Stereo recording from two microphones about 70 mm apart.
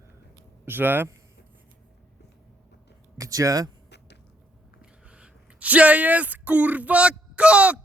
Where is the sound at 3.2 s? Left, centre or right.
Right.